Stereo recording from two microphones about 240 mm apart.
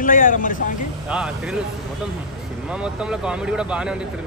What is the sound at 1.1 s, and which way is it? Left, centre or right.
Speech, centre.